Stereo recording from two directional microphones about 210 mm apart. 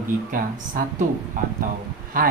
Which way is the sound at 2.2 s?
40° right (ahead or behind).